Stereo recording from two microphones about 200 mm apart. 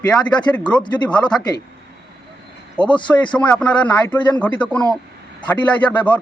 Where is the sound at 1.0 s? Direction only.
5° left (ahead or behind).